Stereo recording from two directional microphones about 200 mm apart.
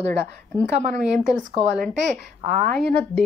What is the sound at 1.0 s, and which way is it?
Speech, 5° right (ahead or behind).